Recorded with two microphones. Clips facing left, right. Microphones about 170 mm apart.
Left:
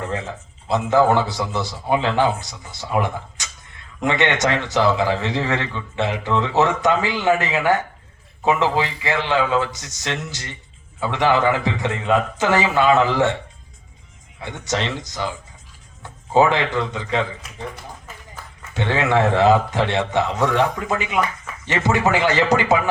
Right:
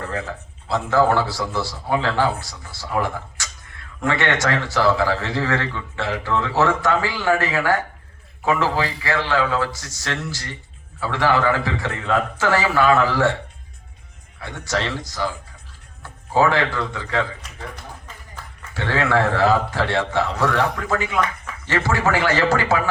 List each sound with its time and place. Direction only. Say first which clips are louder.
0.0 s a man's voice: left 1 dB; 20° left (ahead or behind)
14.3 s a man's voice: left 1 dB; 20° left (ahead or behind)
18.7 s a man's voice: left 1 dB; 20° left (ahead or behind)